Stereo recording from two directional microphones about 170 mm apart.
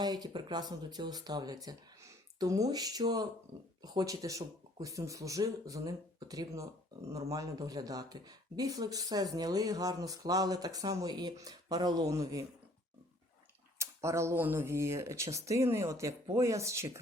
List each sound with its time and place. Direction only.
0.0 s speech: 25° right (ahead or behind)
13.7 s speech: 15° right (ahead or behind)